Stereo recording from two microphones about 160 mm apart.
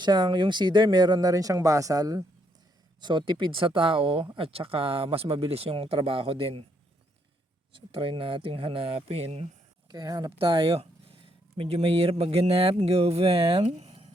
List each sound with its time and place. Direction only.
0.0 s speech: 25° right (ahead or behind)
7.7 s speech: 35° right (ahead or behind)
9.9 s speech: 25° right (ahead or behind)
13.7 s a sound: 45° right (ahead or behind)